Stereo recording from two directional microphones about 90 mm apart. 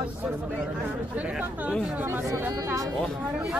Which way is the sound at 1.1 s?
15° right (ahead or behind).